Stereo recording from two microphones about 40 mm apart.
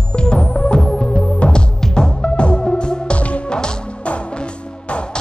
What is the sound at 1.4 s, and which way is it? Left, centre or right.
Music, left.